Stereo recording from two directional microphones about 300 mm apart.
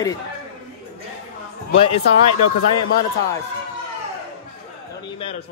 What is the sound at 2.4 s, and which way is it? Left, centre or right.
Speech, left.